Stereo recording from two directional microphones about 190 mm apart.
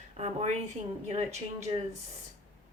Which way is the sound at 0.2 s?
35° right (ahead or behind).